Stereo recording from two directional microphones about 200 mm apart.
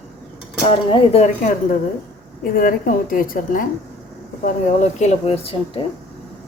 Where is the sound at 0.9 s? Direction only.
30° left (ahead or behind).